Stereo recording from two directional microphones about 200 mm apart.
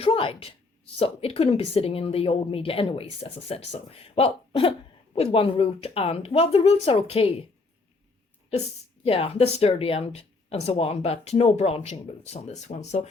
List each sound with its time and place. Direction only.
0.0 s a woman's voice: 25° left (ahead or behind)
9.0 s speech: 30° left (ahead or behind)